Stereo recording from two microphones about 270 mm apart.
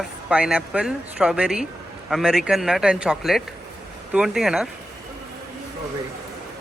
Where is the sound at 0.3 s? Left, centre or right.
Centre.